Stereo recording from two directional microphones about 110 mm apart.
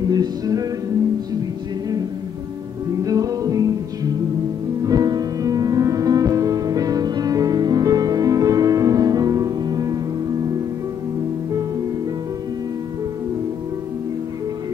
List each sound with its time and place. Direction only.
0.1 s music: 35° right (ahead or behind)
3.0 s music: 35° right (ahead or behind)